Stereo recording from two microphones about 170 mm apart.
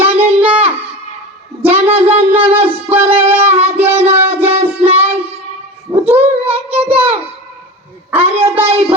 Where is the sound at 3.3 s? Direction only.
10° right (ahead or behind).